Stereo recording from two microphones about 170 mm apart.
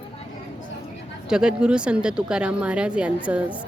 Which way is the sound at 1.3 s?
5° right (ahead or behind).